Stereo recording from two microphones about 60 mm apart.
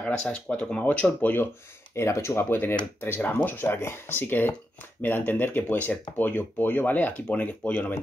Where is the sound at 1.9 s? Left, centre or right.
Left.